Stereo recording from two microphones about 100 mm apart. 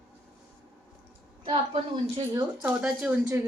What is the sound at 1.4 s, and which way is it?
Speech, 65° right (ahead or behind).